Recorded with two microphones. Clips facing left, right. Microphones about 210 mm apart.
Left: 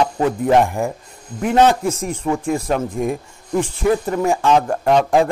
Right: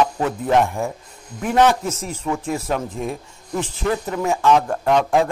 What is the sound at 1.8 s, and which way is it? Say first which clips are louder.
Speech: left 4 dB; 10° left (ahead or behind).